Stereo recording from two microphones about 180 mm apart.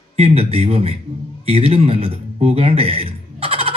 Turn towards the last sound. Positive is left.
turn(degrees=-35)  # may be behind; listen again after turning